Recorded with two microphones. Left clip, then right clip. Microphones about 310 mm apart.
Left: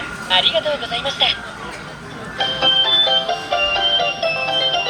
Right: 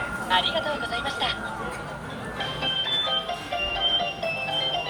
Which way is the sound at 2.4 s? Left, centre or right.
Centre.